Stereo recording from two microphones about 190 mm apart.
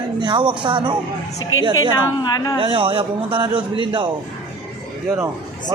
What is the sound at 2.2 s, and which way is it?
Speech, 20° left (ahead or behind).